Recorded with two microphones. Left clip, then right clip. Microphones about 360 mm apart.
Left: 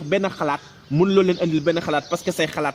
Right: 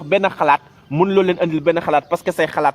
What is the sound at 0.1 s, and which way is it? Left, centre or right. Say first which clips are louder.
A man's voice: right 7 dB; right.